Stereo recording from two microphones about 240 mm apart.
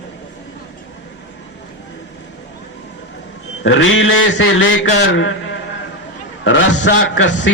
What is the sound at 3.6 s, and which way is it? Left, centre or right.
A man's voice, left.